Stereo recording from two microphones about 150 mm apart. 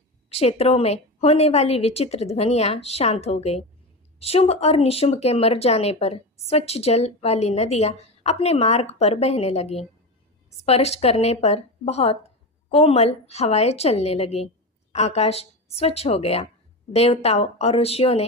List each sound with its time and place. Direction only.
0.3 s speech: 45° left (ahead or behind)